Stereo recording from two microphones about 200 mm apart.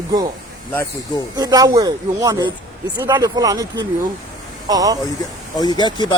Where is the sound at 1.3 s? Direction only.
20° right (ahead or behind).